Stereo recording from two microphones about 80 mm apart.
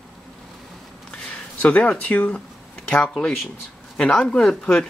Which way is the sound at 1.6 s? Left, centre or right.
Centre.